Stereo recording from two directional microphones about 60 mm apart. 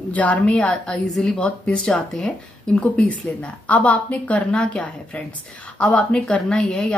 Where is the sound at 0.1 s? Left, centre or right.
Left.